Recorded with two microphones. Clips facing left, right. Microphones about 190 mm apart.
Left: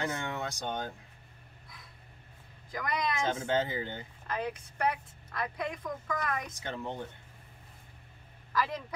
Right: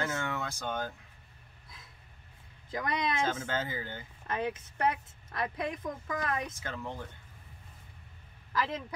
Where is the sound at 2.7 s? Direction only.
25° right (ahead or behind).